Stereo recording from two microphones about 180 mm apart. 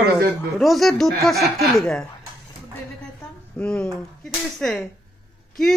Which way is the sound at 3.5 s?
5° left (ahead or behind).